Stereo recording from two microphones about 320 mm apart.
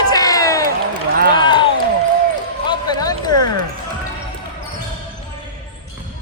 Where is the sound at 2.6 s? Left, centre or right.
Centre.